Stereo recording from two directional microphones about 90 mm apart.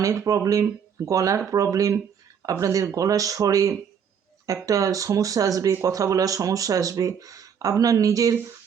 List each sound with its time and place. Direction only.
0.0 s speech: 40° right (ahead or behind)